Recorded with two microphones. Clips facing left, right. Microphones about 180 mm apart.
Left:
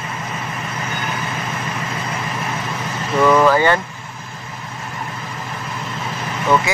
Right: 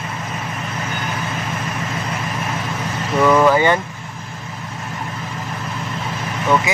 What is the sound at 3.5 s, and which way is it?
Speech, 15° right (ahead or behind).